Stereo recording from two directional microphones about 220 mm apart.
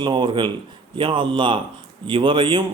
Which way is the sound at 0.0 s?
20° right (ahead or behind).